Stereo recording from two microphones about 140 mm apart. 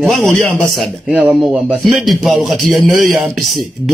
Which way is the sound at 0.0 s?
Centre (ahead or behind).